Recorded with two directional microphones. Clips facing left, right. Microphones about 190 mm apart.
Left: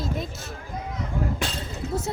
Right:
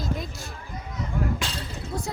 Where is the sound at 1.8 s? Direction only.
65° left (ahead or behind).